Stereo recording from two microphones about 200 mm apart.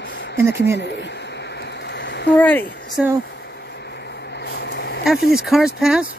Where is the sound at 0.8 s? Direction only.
60° left (ahead or behind).